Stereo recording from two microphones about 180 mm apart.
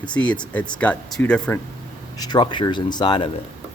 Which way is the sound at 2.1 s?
20° left (ahead or behind).